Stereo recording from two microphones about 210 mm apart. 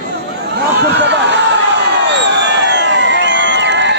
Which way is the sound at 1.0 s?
55° right (ahead or behind).